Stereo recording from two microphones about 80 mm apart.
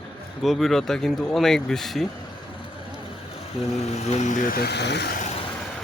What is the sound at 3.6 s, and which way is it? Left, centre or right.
Speech, centre.